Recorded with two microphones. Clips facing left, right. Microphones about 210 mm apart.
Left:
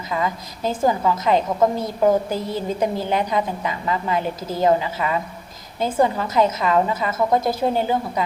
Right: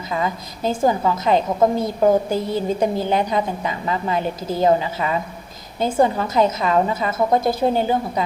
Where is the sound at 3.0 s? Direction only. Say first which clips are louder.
Right 2 dB; 20° right (ahead or behind).